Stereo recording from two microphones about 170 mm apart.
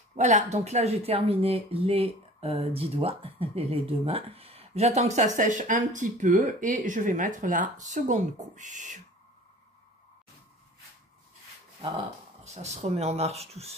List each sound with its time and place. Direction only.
0.1 s speech: 45° right (ahead or behind)
12.4 s speech: 40° right (ahead or behind)